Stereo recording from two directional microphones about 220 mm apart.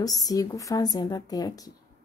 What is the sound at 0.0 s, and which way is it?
Speech, 15° left (ahead or behind).